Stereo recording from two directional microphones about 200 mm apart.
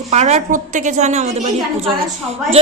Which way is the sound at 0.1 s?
35° right (ahead or behind).